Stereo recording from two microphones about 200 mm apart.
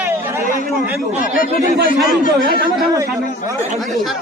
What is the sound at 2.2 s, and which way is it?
Speech, 45° left (ahead or behind).